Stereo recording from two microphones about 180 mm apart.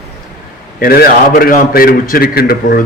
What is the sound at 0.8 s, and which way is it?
A man's voice, 55° left (ahead or behind).